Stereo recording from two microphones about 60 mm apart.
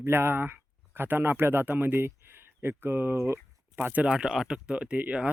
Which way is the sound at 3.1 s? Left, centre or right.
Right.